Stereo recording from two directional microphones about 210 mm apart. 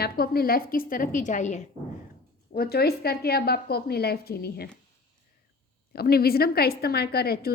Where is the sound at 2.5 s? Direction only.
45° left (ahead or behind).